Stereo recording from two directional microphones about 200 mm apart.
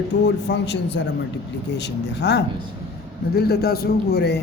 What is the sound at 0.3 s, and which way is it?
A man's voice, 60° left (ahead or behind).